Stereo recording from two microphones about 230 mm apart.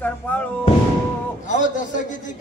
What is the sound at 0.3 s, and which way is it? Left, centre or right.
Music, centre.